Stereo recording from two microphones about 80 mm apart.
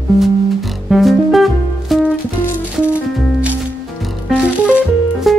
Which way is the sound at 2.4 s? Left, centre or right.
Left.